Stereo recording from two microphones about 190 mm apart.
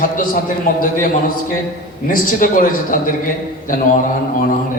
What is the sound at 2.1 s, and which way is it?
A man's voice, 45° left (ahead or behind).